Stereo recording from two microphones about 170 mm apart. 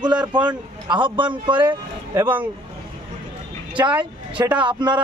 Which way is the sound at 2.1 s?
10° right (ahead or behind).